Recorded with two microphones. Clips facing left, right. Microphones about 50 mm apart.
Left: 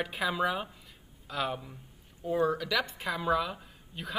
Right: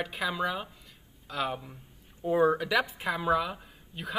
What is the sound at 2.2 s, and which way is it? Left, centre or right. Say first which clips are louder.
A man's voice: right 4 dB; right.